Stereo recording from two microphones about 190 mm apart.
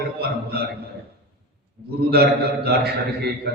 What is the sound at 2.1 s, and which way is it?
A man's voice, 55° right (ahead or behind).